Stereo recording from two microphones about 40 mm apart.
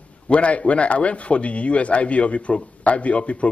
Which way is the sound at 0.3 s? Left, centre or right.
Left.